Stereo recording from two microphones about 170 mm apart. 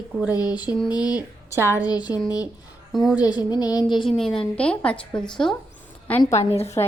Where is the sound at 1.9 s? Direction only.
25° left (ahead or behind).